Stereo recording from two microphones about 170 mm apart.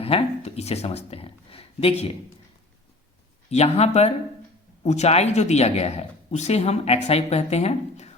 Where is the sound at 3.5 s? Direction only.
40° left (ahead or behind).